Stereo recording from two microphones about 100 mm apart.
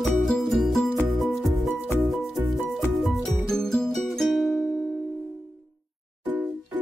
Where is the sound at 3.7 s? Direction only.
5° left (ahead or behind).